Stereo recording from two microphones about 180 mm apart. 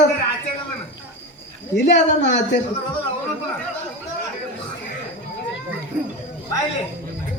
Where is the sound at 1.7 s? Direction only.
75° left (ahead or behind).